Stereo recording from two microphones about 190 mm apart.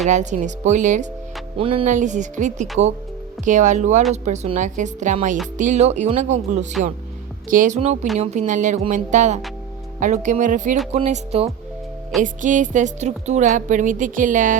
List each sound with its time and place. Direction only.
0.1 s a woman's voice: 40° right (ahead or behind)
1.5 s speech: 30° right (ahead or behind)
1.9 s a woman's voice: 40° right (ahead or behind)